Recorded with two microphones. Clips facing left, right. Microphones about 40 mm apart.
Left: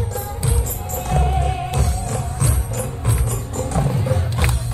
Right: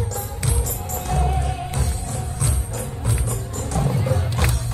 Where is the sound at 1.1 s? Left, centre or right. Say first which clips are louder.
Left 3 dB; left.